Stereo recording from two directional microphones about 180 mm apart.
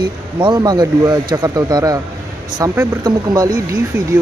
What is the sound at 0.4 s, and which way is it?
Speech, 25° right (ahead or behind).